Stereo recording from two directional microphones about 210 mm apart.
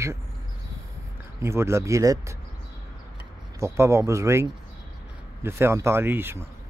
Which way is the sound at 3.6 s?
15° right (ahead or behind).